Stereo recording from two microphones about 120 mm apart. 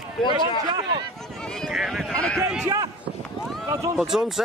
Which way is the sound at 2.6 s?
30° right (ahead or behind).